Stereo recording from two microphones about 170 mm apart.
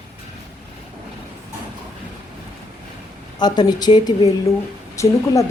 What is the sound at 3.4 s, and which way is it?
Speech, 25° left (ahead or behind).